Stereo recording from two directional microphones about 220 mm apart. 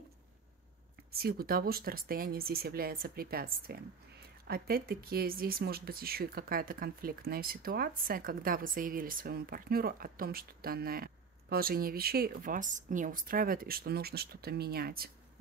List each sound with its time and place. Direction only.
1.1 s speech: 45° right (ahead or behind)